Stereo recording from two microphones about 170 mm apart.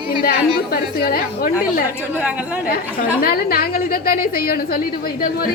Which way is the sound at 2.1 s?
10° right (ahead or behind).